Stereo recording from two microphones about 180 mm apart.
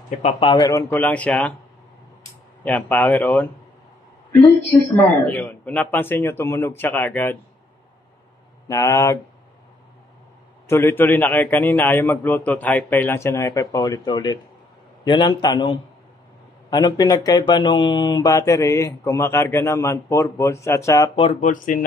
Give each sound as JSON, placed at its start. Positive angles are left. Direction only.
{"t": 0.2, "sound": "speech", "side_deg": 35}
{"t": 2.6, "sound": "speech", "side_deg": 10}
{"t": 5.1, "sound": "speech", "side_deg": 10}
{"t": 8.6, "sound": "speech", "side_deg": 15}
{"t": 10.7, "sound": "a man's voice", "side_deg": 15}
{"t": 21.2, "sound": "speech", "side_deg": 45}